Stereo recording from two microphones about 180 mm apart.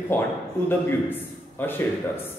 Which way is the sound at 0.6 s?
10° left (ahead or behind).